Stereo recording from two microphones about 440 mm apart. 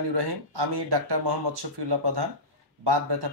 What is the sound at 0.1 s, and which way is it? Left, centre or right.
A man's voice, right.